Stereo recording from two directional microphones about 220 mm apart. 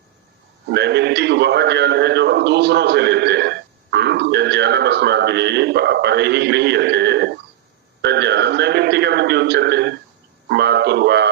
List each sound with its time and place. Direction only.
0.7 s a man's voice: 50° right (ahead or behind)